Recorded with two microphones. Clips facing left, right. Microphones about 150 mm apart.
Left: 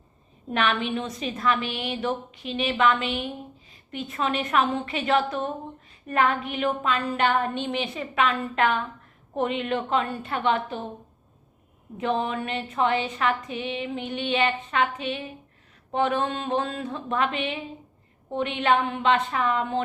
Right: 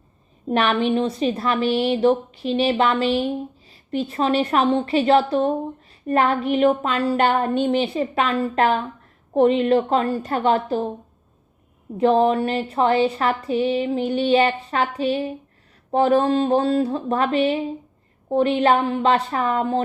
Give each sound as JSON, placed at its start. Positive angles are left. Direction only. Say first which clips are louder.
{"t": 0.5, "sound": "a woman's voice", "louder": "right 6 dB", "side_deg": -35}
{"t": 11.9, "sound": "a woman's voice", "louder": "right 10 dB", "side_deg": -35}